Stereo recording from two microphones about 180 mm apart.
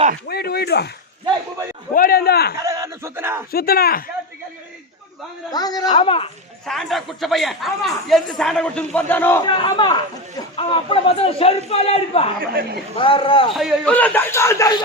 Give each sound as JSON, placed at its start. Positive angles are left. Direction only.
{"t": 0.3, "sound": "a man's voice", "side_deg": 60}
{"t": 1.9, "sound": "a man's voice", "side_deg": 55}
{"t": 2.6, "sound": "a sound", "side_deg": -15}
{"t": 3.5, "sound": "a man's voice", "side_deg": 55}
{"t": 5.5, "sound": "speech", "side_deg": 20}
{"t": 6.7, "sound": "speech", "side_deg": 0}
{"t": 9.5, "sound": "a man's voice", "side_deg": 25}
{"t": 12.4, "sound": "speech", "side_deg": -55}
{"t": 13.0, "sound": "speech", "side_deg": 30}
{"t": 13.6, "sound": "speech", "side_deg": 0}
{"t": 13.9, "sound": "speech", "side_deg": 10}